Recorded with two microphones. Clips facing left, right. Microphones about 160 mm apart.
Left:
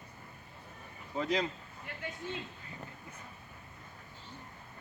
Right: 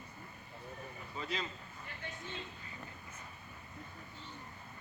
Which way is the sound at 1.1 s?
85° left.